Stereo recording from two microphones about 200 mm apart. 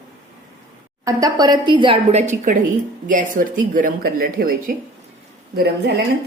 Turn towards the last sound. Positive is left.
turn(degrees=-55)  # may be behind; listen again after turning